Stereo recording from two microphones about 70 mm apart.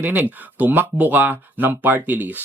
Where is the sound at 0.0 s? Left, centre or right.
Right.